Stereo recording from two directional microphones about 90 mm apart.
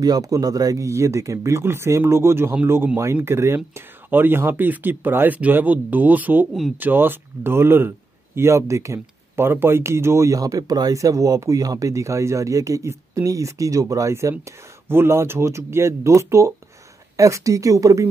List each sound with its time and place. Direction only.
0.0 s speech: 45° right (ahead or behind)